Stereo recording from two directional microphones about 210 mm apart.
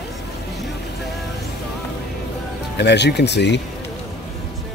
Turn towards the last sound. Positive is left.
turn(degrees=55)  # may be behind; listen again after turning